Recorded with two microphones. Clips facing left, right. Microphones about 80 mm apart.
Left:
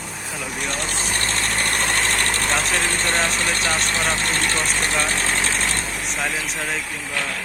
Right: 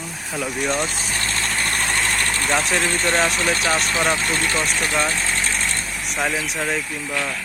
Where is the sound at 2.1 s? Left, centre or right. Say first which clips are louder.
Left 1 dB; left.